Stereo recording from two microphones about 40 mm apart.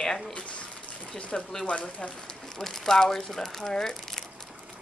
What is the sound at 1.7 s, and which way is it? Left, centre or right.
Speech, left.